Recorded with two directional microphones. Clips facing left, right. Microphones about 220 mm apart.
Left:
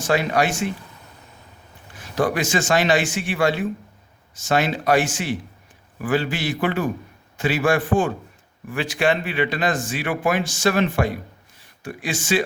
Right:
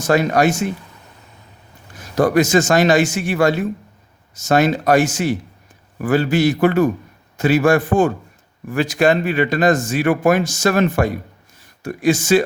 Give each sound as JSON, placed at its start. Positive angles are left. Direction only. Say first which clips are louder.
{"t": 0.0, "sound": "a man's voice", "louder": "right 5 dB", "side_deg": -45}
{"t": 2.0, "sound": "a man's voice", "louder": "right 7 dB", "side_deg": -40}